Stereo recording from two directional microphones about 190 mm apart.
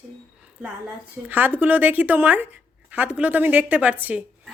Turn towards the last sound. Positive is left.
turn(degrees=-10)  # may be behind; listen again after turning